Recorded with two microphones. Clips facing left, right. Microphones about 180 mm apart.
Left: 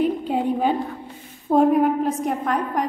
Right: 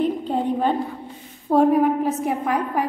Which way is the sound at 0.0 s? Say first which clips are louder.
Left 1 dB; 5° left (ahead or behind).